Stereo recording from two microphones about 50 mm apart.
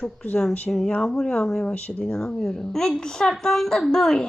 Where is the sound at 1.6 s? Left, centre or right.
Left.